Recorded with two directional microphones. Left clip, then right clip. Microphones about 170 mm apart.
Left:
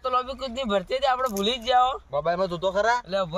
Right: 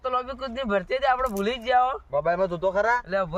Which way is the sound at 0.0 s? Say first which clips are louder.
Left 2 dB; 5° right (ahead or behind).